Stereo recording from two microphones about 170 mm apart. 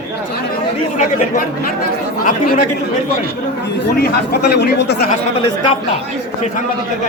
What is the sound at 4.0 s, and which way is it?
Speech, 70° left (ahead or behind).